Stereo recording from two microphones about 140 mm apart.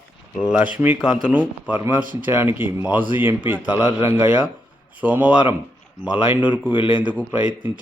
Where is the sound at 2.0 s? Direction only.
80° right.